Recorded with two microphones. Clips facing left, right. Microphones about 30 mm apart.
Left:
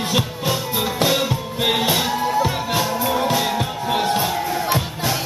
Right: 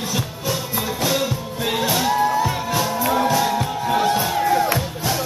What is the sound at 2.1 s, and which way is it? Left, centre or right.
Music, centre.